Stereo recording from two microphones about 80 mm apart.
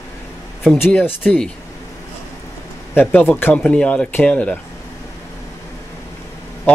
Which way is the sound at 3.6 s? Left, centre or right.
Centre.